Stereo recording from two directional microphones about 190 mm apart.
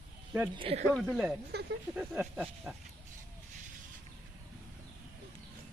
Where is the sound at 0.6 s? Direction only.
30° right (ahead or behind).